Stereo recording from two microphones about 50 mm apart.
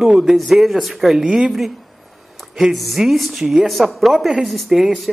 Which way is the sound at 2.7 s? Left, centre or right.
Centre.